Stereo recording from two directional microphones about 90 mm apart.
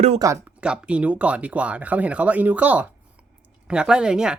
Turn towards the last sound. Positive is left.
turn(degrees=-10)  # may be behind; listen again after turning